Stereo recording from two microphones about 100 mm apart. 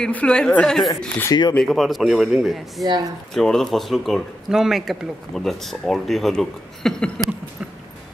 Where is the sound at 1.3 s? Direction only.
40° left (ahead or behind).